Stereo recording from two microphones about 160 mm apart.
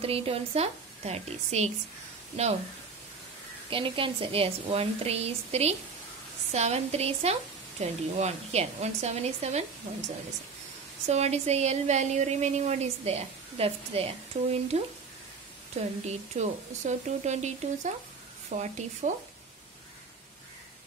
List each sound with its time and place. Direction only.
0.0 s a woman's voice: 35° right (ahead or behind)
3.7 s a woman's voice: 30° right (ahead or behind)